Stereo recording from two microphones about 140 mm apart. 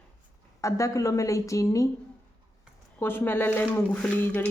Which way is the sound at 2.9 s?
15° left (ahead or behind).